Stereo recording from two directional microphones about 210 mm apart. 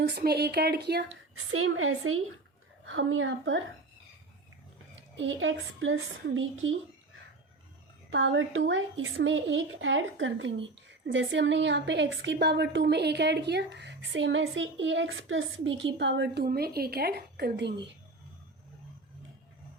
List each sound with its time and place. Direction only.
0.1 s speech: 50° right (ahead or behind)
1.4 s a woman's voice: 90° right
2.8 s a woman's voice: 70° right (ahead or behind)
5.1 s a woman's voice: 65° right (ahead or behind)
8.1 s a woman's voice: 65° right (ahead or behind)